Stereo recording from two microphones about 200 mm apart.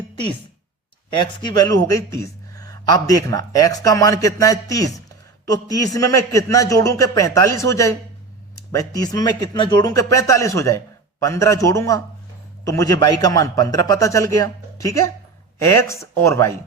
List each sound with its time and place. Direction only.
1.2 s speech: 20° left (ahead or behind)